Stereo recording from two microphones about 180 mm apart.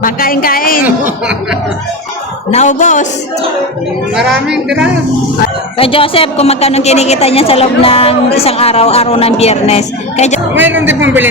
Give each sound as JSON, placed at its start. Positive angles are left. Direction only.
{"t": 0.0, "sound": "speech", "side_deg": 55}
{"t": 1.0, "sound": "speech", "side_deg": -5}
{"t": 2.5, "sound": "speech", "side_deg": 40}
{"t": 4.2, "sound": "speech", "side_deg": 0}
{"t": 5.7, "sound": "a woman's voice", "side_deg": 30}
{"t": 10.5, "sound": "a man's voice", "side_deg": -10}